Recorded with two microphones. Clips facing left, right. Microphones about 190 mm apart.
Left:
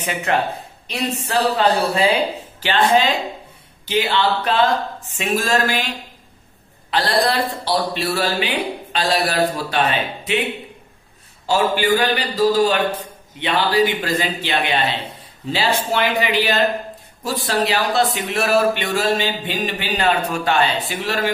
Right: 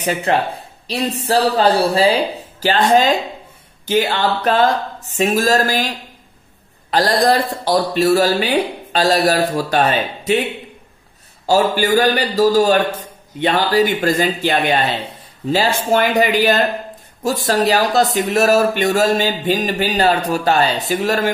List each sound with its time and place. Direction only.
0.0 s speech: 35° right (ahead or behind)
6.9 s speech: 40° right (ahead or behind)
11.4 s speech: 40° right (ahead or behind)